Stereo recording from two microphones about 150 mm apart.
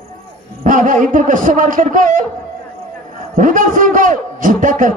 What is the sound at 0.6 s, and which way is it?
A man's voice, 60° right (ahead or behind).